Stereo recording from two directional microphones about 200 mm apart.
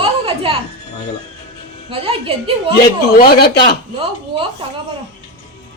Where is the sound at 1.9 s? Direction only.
30° right (ahead or behind).